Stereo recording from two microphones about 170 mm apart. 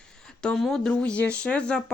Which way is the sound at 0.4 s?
Centre (ahead or behind).